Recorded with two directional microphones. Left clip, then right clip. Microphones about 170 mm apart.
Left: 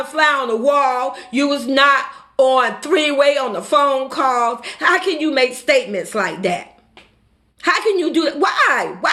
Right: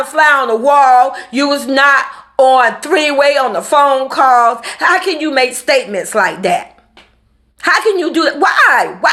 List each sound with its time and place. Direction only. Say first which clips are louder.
0.0 s speech: right 6 dB; 20° left (ahead or behind)